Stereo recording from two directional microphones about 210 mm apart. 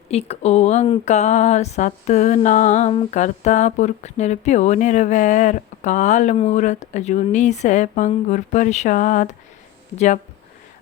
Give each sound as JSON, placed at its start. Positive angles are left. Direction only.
{"t": 0.1, "sound": "speech", "side_deg": 30}